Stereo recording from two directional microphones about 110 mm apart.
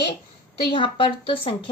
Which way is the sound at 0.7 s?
50° left (ahead or behind).